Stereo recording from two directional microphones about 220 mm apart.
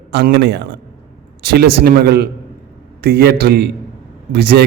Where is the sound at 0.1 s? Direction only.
50° right (ahead or behind).